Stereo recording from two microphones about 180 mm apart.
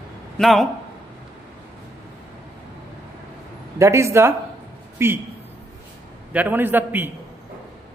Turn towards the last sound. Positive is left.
turn(degrees=-10)  # may be behind; listen again after turning